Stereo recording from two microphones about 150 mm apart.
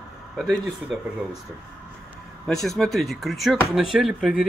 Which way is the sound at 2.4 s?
5° left (ahead or behind).